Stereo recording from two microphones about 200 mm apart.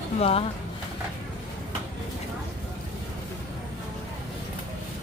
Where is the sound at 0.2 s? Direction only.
30° left (ahead or behind).